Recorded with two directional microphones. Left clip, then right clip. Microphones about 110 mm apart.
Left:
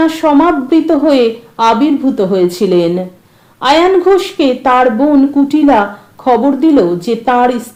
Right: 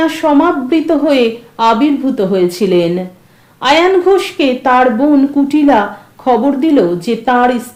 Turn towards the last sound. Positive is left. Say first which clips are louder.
# left 1 dB
turn(degrees=40)  # may be behind; listen again after turning